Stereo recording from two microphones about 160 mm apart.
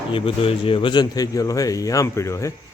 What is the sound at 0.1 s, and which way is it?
Speech, 35° left (ahead or behind).